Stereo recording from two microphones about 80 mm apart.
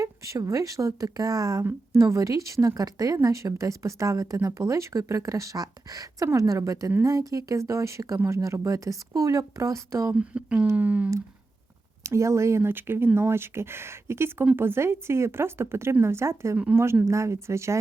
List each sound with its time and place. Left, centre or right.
0.0 s speech: right
10.2 s speech: centre
12.0 s speech: right
16.6 s speech: right
16.8 s speech: right